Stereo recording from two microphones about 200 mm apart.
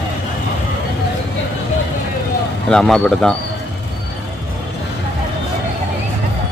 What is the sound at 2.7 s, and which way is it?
Speech, 5° left (ahead or behind).